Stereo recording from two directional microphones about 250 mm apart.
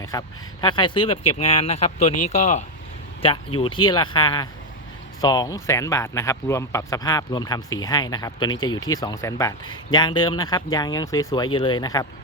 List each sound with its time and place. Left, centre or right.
0.0 s speech: centre